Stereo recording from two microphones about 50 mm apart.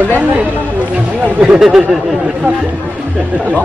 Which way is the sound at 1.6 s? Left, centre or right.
Centre.